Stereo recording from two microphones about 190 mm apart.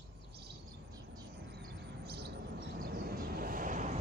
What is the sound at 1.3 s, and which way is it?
Vehicle, 60° right (ahead or behind).